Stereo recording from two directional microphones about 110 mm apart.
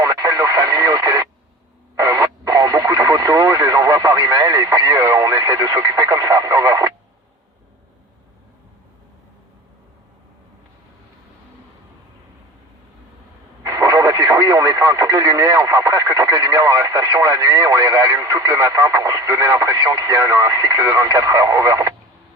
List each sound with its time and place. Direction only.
0.0 s radio: 30° right (ahead or behind)
13.6 s radio: 30° right (ahead or behind)
20.8 s speech: 30° right (ahead or behind)